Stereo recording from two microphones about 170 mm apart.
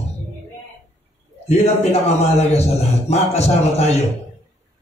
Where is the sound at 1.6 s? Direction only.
40° left (ahead or behind).